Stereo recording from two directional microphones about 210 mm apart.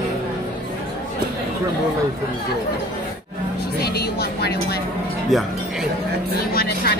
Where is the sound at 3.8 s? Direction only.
50° left (ahead or behind).